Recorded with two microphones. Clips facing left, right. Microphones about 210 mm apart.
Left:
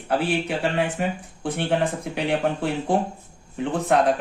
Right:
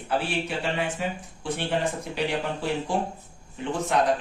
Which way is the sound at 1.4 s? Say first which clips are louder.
Left 4 dB; 55° left (ahead or behind).